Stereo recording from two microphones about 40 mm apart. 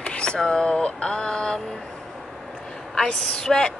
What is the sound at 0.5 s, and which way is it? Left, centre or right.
Speech, left.